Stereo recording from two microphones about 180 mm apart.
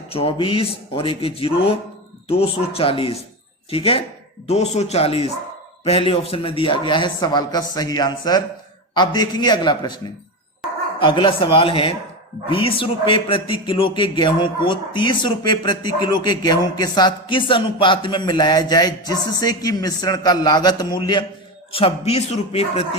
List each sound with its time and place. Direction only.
0.1 s a man's voice: 30° left (ahead or behind)
11.0 s a man's voice: 30° left (ahead or behind)